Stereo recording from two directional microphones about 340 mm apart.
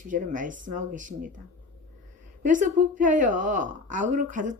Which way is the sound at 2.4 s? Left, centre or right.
Right.